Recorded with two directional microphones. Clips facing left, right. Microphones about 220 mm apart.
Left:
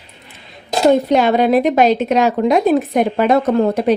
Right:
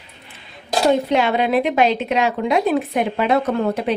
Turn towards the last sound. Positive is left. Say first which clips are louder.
# left 6 dB
turn(degrees=40)  # may be behind; listen again after turning